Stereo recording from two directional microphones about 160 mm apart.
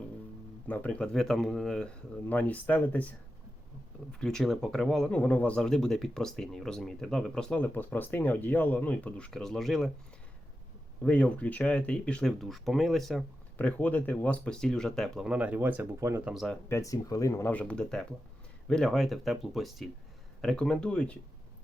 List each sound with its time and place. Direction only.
0.7 s speech: 10° left (ahead or behind)
11.0 s speech: 10° left (ahead or behind); by 16.3 s 15° right (ahead or behind)
16.3 s speech: centre (ahead or behind)
16.6 s speech: 20° left (ahead or behind)